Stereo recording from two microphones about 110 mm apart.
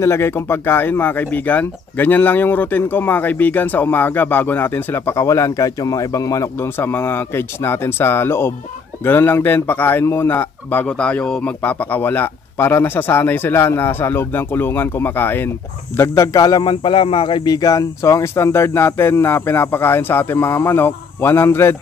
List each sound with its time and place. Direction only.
0.0 s speech: 25° left (ahead or behind)
16.4 s speech: 45° left (ahead or behind)
17.5 s speech: 30° left (ahead or behind)